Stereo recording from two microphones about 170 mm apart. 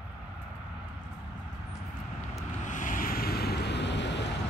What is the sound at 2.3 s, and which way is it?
Vehicle, 50° left (ahead or behind).